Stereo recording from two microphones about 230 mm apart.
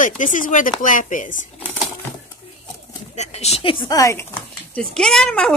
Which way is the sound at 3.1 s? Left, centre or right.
Left.